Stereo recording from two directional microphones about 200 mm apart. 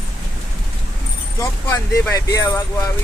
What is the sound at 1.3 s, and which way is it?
Speech, 15° left (ahead or behind).